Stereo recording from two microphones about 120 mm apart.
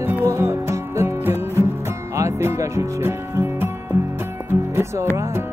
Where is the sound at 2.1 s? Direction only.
25° right (ahead or behind).